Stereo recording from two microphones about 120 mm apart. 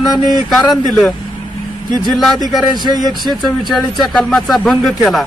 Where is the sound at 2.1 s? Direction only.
Centre (ahead or behind).